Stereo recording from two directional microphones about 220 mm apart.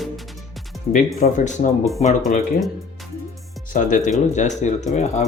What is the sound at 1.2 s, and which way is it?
Speech, 35° left (ahead or behind).